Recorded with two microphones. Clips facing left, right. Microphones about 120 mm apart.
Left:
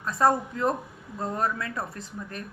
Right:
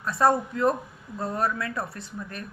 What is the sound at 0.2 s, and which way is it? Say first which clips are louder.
Mantra: right 1 dB; 25° left (ahead or behind).